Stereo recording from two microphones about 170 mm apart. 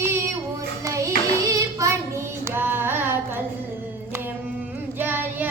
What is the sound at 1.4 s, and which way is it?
Child singing, 20° right (ahead or behind).